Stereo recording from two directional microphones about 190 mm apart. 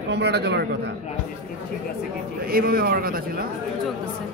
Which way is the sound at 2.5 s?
50° right (ahead or behind).